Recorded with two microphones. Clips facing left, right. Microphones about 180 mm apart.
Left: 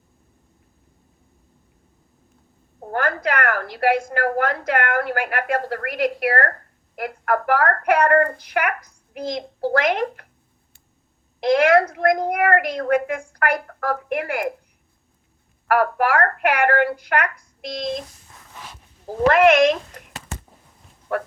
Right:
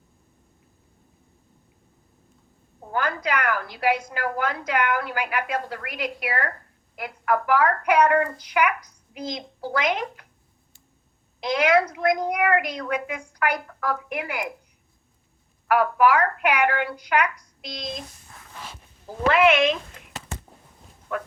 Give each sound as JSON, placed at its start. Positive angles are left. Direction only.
{"t": 2.8, "sound": "a woman's voice", "side_deg": 55}
{"t": 11.4, "sound": "a woman's voice", "side_deg": 55}
{"t": 15.6, "sound": "a woman's voice", "side_deg": 60}
{"t": 19.0, "sound": "a woman's voice", "side_deg": 45}